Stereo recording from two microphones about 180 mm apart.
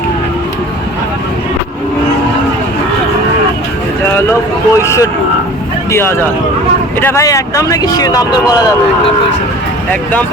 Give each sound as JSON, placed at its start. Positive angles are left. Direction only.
{"t": 4.8, "sound": "speech", "side_deg": 15}
{"t": 9.9, "sound": "speech", "side_deg": 10}